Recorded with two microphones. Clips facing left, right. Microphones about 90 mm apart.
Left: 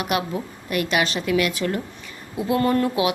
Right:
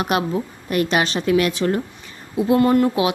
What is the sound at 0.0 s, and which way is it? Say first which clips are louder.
Speech: right 4 dB; 30° right (ahead or behind).